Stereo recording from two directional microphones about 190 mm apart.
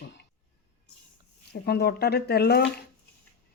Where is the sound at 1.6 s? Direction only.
55° left (ahead or behind).